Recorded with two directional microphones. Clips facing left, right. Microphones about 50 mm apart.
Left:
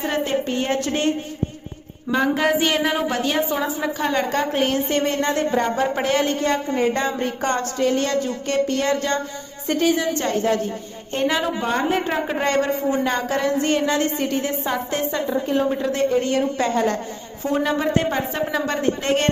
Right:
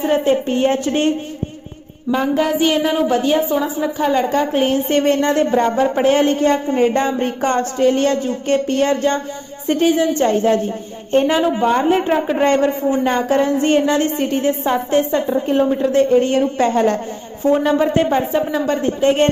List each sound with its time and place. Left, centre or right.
0.1 s a woman's voice: right
2.3 s a woman's voice: centre
4.9 s a man's voice: right; by 18.4 s centre
18.5 s a woman's voice: centre